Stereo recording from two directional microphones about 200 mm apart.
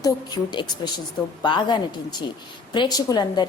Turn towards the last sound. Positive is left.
turn(degrees=20)  # may be behind; listen again after turning